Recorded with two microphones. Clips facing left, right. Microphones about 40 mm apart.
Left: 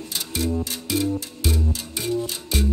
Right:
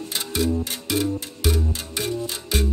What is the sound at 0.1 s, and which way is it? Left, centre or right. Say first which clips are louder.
Music: right 2 dB; right.